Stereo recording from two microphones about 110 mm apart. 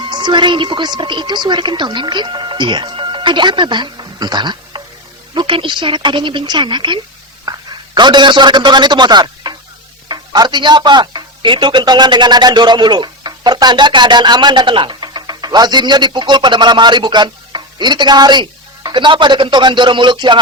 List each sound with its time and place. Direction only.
0.1 s a woman's voice: 45° right (ahead or behind)